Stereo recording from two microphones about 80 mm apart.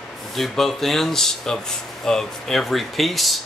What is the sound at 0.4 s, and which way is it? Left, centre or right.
Speech, centre.